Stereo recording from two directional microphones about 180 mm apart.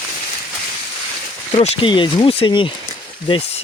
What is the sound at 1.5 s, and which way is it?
Speech, 30° left (ahead or behind).